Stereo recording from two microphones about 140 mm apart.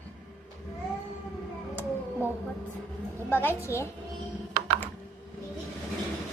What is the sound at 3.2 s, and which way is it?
Speech, 15° left (ahead or behind).